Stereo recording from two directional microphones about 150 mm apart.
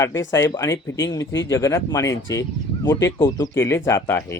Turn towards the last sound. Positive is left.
turn(degrees=15)  # may be behind; listen again after turning